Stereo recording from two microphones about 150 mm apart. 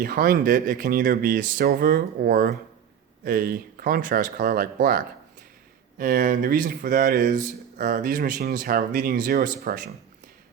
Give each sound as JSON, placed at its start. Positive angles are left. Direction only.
{"t": 0.0, "sound": "speech", "side_deg": -75}
{"t": 6.0, "sound": "speech", "side_deg": -70}